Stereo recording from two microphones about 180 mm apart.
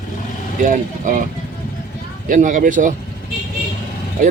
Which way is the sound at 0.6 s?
50° right (ahead or behind).